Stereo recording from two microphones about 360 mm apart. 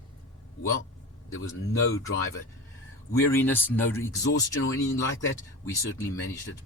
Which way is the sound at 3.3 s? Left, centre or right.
Centre.